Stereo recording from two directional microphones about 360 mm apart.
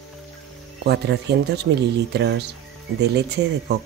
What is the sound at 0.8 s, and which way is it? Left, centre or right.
Speech, right.